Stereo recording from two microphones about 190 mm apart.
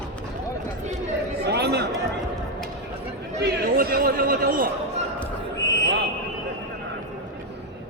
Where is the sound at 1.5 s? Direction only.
60° right (ahead or behind).